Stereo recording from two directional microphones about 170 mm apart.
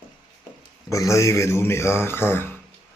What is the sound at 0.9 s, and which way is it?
Speech, 20° left (ahead or behind).